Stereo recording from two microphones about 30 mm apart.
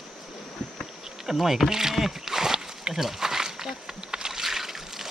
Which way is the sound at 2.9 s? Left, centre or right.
Centre.